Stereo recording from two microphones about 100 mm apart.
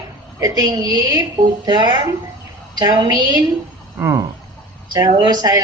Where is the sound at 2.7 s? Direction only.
45° right (ahead or behind).